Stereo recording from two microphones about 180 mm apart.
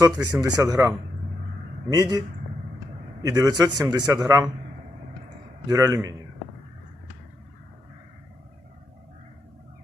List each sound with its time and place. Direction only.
0.0 s a man's voice: 20° right (ahead or behind)
5.6 s a man's voice: 20° right (ahead or behind)